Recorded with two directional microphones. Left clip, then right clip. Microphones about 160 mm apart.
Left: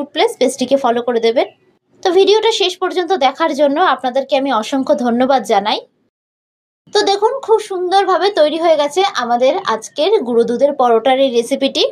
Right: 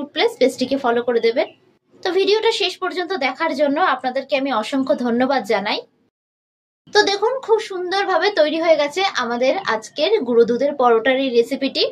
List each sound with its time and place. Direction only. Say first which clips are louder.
0.1 s speech: left 2 dB; 45° left (ahead or behind)
6.9 s speech: left 3 dB; 30° left (ahead or behind)